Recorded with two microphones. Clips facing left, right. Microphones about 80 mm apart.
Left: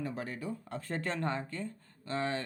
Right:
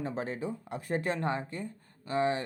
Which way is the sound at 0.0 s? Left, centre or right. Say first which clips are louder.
Right 4 dB; right.